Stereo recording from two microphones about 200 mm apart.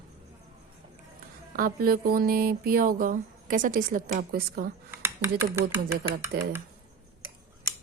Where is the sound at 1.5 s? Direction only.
45° right (ahead or behind).